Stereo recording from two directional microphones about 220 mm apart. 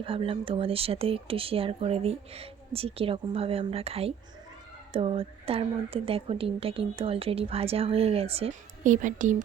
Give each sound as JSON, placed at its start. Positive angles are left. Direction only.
{"t": 0.0, "sound": "speech", "side_deg": -25}